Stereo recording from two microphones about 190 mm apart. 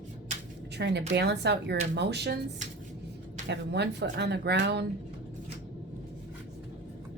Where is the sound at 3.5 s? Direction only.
65° right (ahead or behind).